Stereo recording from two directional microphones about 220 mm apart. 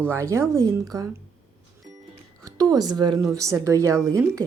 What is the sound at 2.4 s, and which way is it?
Speech, 15° right (ahead or behind).